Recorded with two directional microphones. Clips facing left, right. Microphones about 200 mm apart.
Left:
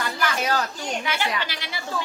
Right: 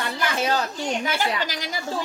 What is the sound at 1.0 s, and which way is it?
Speech, 40° right (ahead or behind).